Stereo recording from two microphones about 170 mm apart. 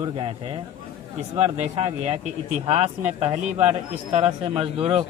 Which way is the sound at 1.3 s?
35° right (ahead or behind).